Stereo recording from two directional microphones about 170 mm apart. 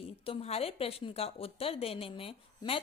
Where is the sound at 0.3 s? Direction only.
35° left (ahead or behind).